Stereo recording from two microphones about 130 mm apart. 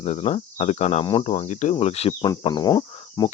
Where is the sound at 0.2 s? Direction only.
55° left (ahead or behind); by 1.7 s 70° left (ahead or behind).